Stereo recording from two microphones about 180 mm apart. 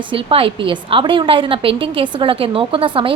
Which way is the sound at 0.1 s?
30° right (ahead or behind).